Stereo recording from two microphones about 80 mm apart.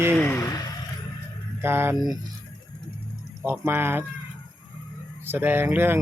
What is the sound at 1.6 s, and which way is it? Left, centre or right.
Speech, right.